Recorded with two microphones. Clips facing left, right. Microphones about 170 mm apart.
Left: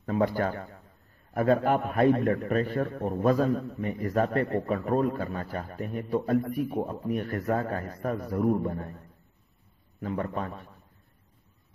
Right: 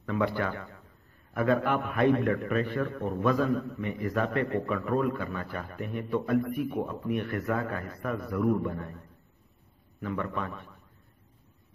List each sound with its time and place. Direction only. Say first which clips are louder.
0.0 s a man's voice: left 3 dB; 40° left (ahead or behind)
10.0 s a man's voice: left 1 dB; 35° left (ahead or behind)